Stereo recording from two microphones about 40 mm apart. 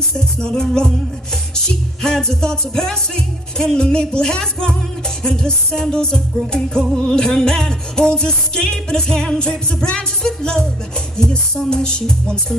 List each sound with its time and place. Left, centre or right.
0.1 s music: centre
2.0 s music: centre